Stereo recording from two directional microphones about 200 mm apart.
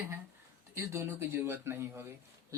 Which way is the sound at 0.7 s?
15° right (ahead or behind).